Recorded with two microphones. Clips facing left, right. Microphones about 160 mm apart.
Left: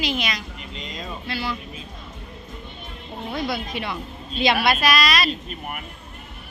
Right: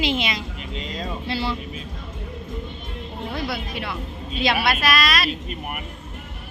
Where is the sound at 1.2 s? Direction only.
30° right (ahead or behind).